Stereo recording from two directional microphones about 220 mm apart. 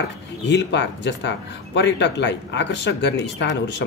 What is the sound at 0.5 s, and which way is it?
Speech, 50° left (ahead or behind).